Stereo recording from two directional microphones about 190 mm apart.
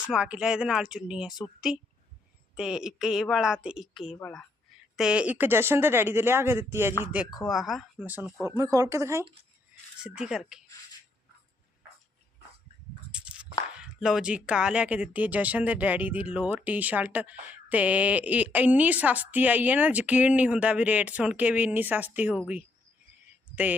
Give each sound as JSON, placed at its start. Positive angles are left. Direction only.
{"t": 0.1, "sound": "a woman's voice", "side_deg": -5}
{"t": 8.4, "sound": "a woman's voice", "side_deg": -15}
{"t": 10.0, "sound": "speech", "side_deg": -5}
{"t": 13.1, "sound": "a woman's voice", "side_deg": -5}